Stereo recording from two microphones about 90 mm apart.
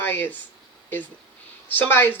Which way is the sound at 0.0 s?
25° left (ahead or behind).